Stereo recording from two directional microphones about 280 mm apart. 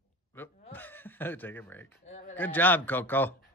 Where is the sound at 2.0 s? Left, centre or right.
Left.